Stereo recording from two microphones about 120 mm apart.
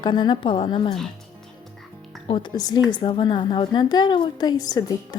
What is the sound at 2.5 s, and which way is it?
A woman's voice, 35° left (ahead or behind).